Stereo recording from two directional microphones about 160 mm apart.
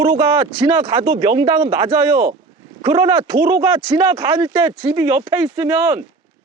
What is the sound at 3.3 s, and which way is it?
Speech, 20° right (ahead or behind).